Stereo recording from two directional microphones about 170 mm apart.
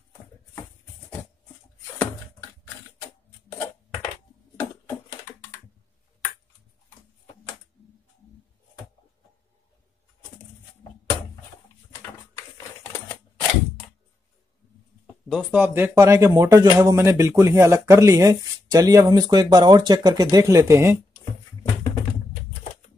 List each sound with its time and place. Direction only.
11.9 s a sound: 20° left (ahead or behind)
15.2 s speech: 5° right (ahead or behind)
22.5 s music: 40° left (ahead or behind)